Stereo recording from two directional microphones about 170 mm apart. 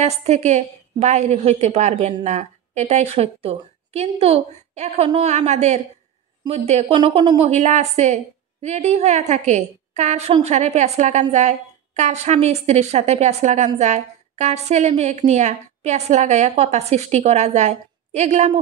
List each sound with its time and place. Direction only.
0.0 s a woman's voice: 40° right (ahead or behind)